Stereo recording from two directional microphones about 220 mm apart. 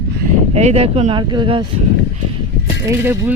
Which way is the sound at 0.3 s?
30° right (ahead or behind).